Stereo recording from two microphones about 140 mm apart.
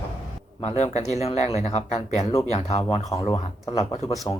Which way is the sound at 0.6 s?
55° left (ahead or behind).